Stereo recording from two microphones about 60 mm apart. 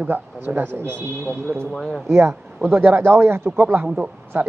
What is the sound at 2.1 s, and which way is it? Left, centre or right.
Speech, right.